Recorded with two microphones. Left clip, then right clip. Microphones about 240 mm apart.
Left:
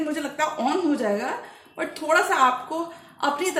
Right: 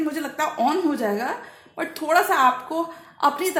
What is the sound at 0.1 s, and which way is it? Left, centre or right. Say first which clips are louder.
A woman's voice: even; right.